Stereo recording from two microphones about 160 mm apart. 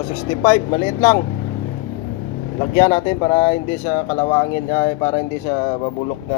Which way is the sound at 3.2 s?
30° left (ahead or behind).